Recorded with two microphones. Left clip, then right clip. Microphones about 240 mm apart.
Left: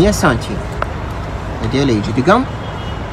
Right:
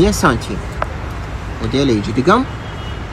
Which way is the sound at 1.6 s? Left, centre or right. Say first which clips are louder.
Even; centre.